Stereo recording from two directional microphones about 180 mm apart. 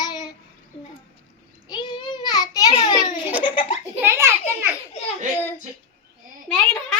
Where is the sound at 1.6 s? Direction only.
25° left (ahead or behind).